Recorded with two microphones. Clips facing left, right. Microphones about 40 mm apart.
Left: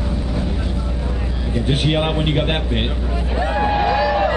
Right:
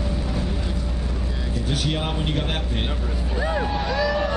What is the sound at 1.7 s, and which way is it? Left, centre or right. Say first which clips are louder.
A man's voice: left 7 dB; left.